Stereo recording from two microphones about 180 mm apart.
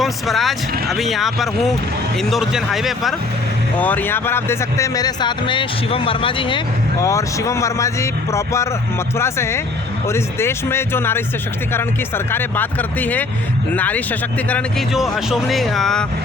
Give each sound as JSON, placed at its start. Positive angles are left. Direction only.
{"t": 0.0, "sound": "speech", "side_deg": 0}
{"t": 3.8, "sound": "speech", "side_deg": 10}
{"t": 7.0, "sound": "speech", "side_deg": 15}